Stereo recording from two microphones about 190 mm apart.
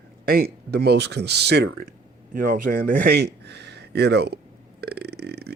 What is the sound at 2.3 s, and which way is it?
Speech, 45° right (ahead or behind).